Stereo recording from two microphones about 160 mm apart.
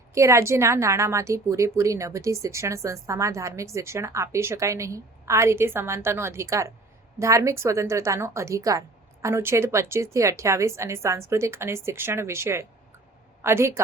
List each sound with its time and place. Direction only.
0.1 s a woman's voice: 20° right (ahead or behind)